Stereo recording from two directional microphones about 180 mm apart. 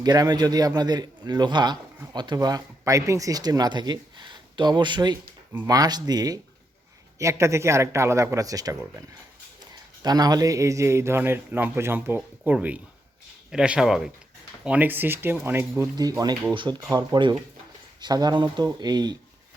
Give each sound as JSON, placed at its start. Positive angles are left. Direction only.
{"t": 0.0, "sound": "a man's voice", "side_deg": -20}